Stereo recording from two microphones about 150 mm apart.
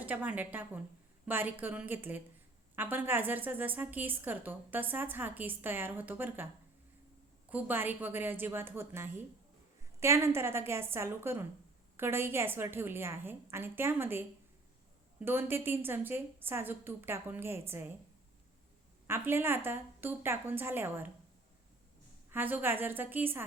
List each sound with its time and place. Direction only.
0.0 s a woman's voice: 10° right (ahead or behind)
7.5 s a woman's voice: 15° right (ahead or behind)
19.0 s a woman's voice: 15° right (ahead or behind)
22.3 s a woman's voice: 15° right (ahead or behind)